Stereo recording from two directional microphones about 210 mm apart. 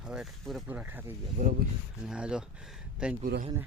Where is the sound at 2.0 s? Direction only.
5° right (ahead or behind).